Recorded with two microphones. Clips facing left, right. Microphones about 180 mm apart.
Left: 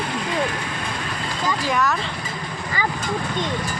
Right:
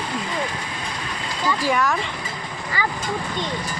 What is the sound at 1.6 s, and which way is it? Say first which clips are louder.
Speech: right 1 dB; 10° right (ahead or behind).